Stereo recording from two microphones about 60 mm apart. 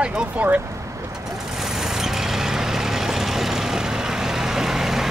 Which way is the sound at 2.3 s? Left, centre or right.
Centre.